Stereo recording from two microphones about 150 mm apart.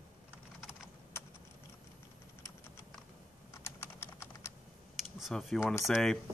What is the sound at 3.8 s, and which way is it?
Typing, 20° left (ahead or behind).